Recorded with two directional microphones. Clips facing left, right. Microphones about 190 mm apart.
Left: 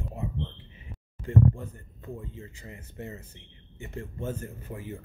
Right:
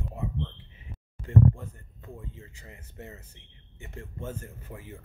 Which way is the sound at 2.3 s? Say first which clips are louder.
Left 5 dB; 25° left (ahead or behind).